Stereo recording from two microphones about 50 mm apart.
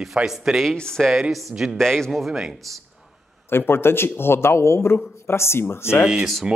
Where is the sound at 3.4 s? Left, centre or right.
Left.